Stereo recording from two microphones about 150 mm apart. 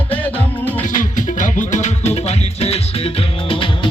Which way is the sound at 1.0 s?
60° left (ahead or behind).